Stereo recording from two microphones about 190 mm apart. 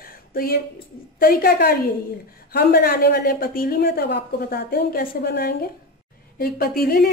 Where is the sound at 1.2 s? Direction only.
50° left (ahead or behind).